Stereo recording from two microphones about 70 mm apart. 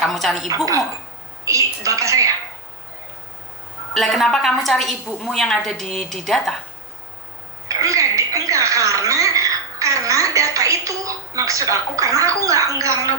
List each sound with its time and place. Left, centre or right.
0.0 s speech: centre
1.5 s a woman's voice: right
3.9 s a woman's voice: centre
7.7 s a woman's voice: right